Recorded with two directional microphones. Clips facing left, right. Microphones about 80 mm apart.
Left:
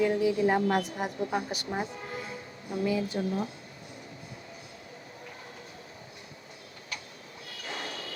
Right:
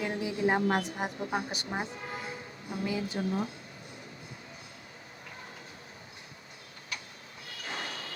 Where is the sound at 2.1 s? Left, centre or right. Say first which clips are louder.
Left 1 dB; right.